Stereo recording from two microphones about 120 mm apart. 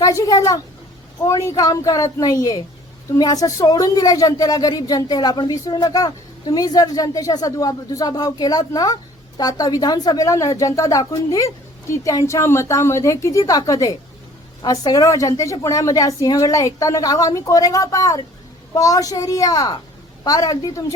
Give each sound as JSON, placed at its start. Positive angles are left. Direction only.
{"t": 0.0, "sound": "a woman's voice", "side_deg": 30}